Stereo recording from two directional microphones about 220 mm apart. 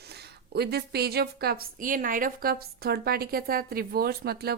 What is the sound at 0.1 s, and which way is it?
A woman's voice, 45° right (ahead or behind).